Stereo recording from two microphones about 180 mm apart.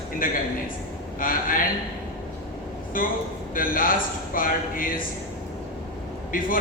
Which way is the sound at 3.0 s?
50° left (ahead or behind).